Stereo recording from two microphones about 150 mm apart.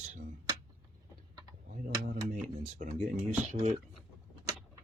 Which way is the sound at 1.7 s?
60° right (ahead or behind).